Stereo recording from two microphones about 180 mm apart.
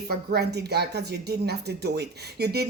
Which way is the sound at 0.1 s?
65° right (ahead or behind).